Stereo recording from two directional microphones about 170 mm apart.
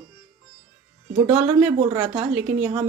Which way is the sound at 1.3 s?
40° right (ahead or behind).